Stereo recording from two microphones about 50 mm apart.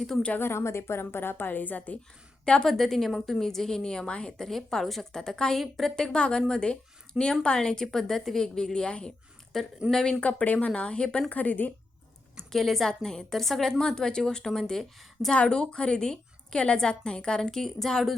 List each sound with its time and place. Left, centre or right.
0.3 s a woman's voice: left
2.4 s a woman's voice: centre
2.6 s a woman's voice: centre
4.4 s a woman's voice: centre
9.5 s a woman's voice: centre
10.2 s a woman's voice: left
12.5 s a woman's voice: centre
15.3 s a woman's voice: centre